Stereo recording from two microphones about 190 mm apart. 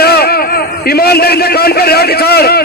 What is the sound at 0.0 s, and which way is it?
A man's voice, 55° left (ahead or behind).